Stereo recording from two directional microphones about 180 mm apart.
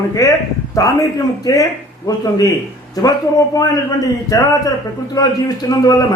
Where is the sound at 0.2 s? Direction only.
20° left (ahead or behind).